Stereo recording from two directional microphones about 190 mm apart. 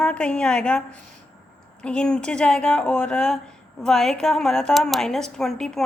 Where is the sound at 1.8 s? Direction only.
5° left (ahead or behind).